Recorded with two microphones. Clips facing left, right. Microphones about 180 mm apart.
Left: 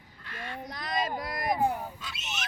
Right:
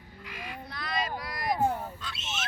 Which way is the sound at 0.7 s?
45° left (ahead or behind).